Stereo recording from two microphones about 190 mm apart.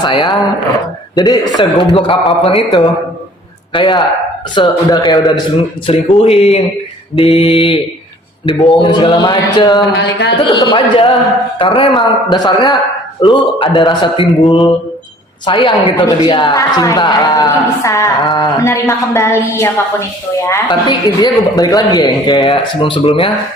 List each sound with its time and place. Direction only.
0.0 s a man's voice: 25° left (ahead or behind)
8.8 s speech: 25° left (ahead or behind)
9.9 s speech: 60° left (ahead or behind)
10.5 s a man's voice: 20° left (ahead or behind)